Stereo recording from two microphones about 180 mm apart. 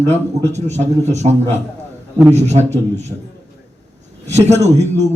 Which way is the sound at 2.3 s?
40° right (ahead or behind).